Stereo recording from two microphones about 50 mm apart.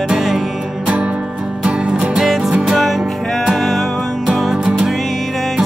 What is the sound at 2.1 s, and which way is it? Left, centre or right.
Music, centre.